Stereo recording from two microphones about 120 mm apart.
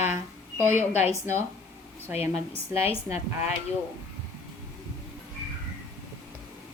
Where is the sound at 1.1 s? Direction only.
20° right (ahead or behind).